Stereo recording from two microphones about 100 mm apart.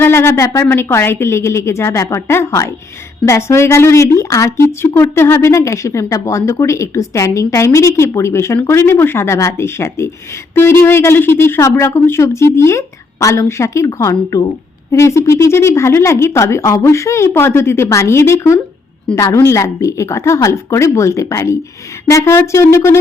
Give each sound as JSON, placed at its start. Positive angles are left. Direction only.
{"t": 0.0, "sound": "a woman's voice", "side_deg": 25}